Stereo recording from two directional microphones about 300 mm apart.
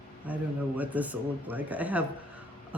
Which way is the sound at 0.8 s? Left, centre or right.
Centre.